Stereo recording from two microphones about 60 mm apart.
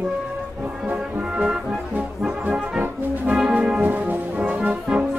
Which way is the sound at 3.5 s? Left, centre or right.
Centre.